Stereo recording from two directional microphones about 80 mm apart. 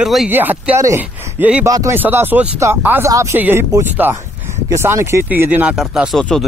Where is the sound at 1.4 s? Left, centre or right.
Right.